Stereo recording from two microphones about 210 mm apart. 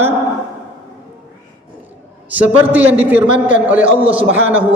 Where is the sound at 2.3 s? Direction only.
10° right (ahead or behind).